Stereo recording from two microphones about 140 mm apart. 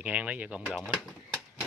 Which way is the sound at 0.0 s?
10° right (ahead or behind).